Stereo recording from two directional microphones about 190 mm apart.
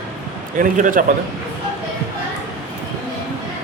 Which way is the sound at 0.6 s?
45° right (ahead or behind).